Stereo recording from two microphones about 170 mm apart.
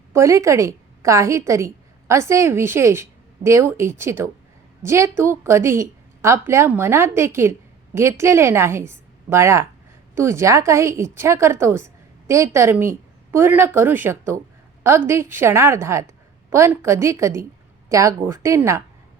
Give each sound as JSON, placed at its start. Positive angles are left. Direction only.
{"t": 0.1, "sound": "a woman's voice", "side_deg": -15}